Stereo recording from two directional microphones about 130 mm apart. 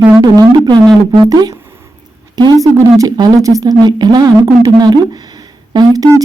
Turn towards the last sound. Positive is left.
turn(degrees=-30)  # may be behind; listen again after turning